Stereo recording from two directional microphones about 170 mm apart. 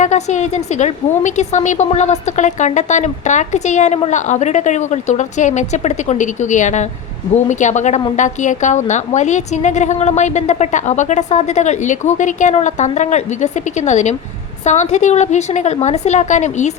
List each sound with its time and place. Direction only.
0.0 s a woman's voice: 45° left (ahead or behind)